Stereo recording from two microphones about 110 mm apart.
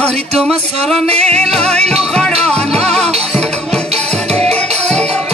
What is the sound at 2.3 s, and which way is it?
Music, 70° right (ahead or behind).